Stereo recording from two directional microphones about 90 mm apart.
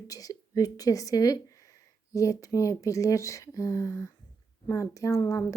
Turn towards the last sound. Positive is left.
turn(degrees=40)  # may be behind; listen again after turning